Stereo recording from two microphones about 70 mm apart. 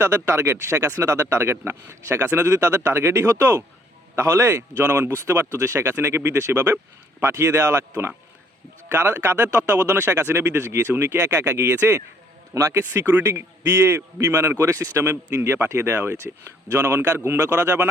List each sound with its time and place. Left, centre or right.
0.0 s a man's voice: right
12.9 s speech: right